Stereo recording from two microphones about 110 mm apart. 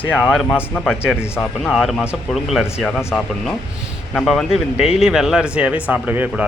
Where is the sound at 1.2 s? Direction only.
20° left (ahead or behind).